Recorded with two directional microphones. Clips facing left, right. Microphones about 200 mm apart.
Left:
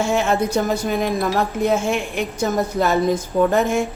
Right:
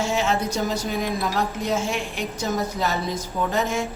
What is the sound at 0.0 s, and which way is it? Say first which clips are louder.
Speech: left 4 dB; 55° left (ahead or behind).